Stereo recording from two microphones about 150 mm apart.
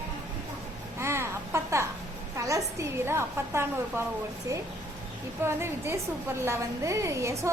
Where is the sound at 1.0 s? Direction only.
15° right (ahead or behind).